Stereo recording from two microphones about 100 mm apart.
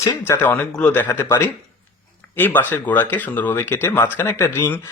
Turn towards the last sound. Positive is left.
turn(degrees=25)  # may be behind; listen again after turning